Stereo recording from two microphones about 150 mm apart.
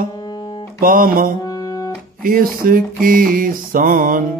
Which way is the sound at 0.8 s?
70° right (ahead or behind).